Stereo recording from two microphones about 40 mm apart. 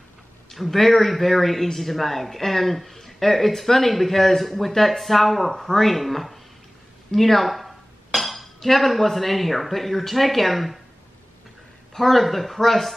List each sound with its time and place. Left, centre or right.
0.5 s a man's voice: centre
11.9 s a man's voice: centre